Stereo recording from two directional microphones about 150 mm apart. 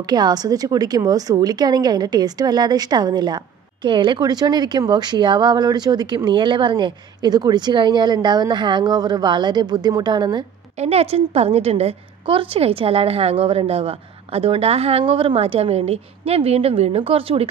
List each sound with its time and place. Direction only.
0.0 s a woman's voice: 25° right (ahead or behind)
10.8 s a woman's voice: 45° right (ahead or behind)